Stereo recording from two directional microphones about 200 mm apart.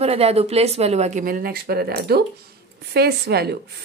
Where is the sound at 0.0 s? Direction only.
30° right (ahead or behind).